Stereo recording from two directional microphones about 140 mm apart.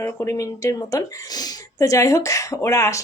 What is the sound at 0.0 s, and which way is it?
Speech, 20° left (ahead or behind).